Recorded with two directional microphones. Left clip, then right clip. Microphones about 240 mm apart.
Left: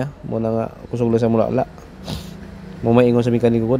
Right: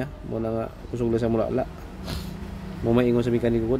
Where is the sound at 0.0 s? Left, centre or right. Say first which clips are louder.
Left 6 dB; left.